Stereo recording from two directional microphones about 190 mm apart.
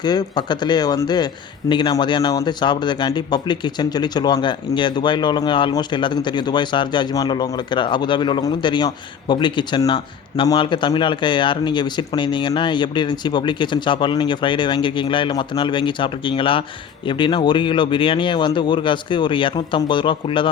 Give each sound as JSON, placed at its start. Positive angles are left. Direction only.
{"t": 0.0, "sound": "a man's voice", "side_deg": 20}